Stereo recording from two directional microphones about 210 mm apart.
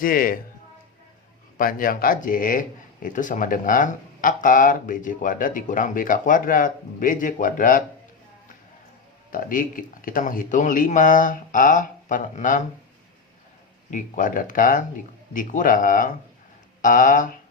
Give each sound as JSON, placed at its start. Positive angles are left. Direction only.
{"t": 0.0, "sound": "speech", "side_deg": 40}
{"t": 1.5, "sound": "speech", "side_deg": 45}
{"t": 9.3, "sound": "speech", "side_deg": 40}
{"t": 13.9, "sound": "speech", "side_deg": 40}